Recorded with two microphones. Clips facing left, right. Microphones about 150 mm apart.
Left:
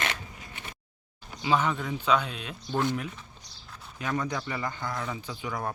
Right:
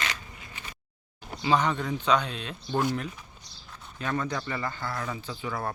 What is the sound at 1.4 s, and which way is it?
Speech, 5° left (ahead or behind).